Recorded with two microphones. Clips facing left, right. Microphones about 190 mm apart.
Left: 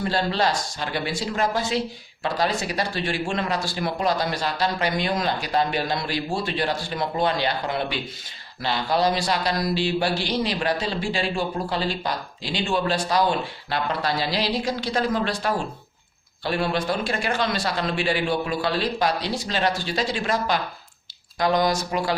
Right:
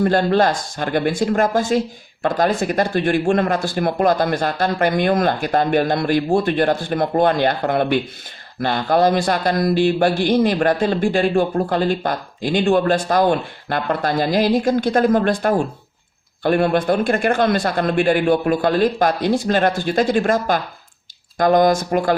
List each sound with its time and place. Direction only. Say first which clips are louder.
0.0 s a man's voice: right 8 dB; 55° right (ahead or behind)